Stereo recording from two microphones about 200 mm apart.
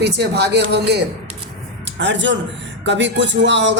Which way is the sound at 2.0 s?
65° right (ahead or behind).